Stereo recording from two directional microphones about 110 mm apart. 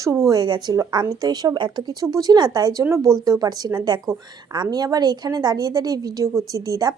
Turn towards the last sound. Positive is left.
turn(degrees=-35)  # may be behind; listen again after turning